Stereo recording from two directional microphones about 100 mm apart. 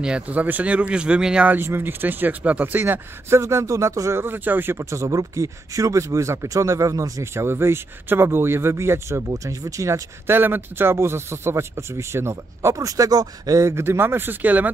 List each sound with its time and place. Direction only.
0.0 s speech: 10° right (ahead or behind)